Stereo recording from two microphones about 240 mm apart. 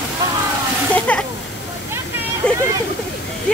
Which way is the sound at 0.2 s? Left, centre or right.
Centre.